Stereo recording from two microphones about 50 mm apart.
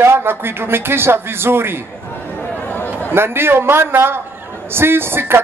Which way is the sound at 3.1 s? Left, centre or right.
Right.